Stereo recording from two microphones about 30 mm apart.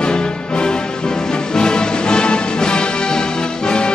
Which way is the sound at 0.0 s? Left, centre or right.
Left.